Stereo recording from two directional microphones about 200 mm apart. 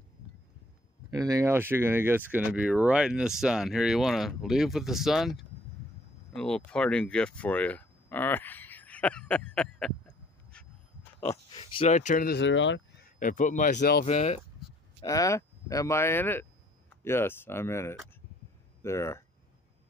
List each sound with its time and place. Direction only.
1.1 s speech: 15° right (ahead or behind); by 9.9 s 5° left (ahead or behind)
11.5 s speech: 25° left (ahead or behind)
12.4 s speech: 65° left (ahead or behind)
13.2 s speech: 40° left (ahead or behind)
14.0 s speech: 35° left (ahead or behind)
15.0 s speech: 15° left (ahead or behind)